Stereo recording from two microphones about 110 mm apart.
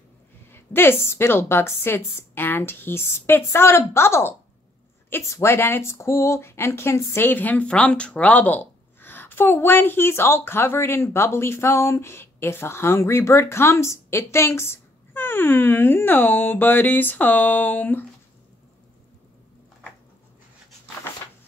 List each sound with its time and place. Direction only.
0.5 s speech: 20° left (ahead or behind)